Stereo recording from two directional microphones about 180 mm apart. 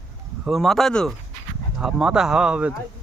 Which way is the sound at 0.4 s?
Centre (ahead or behind).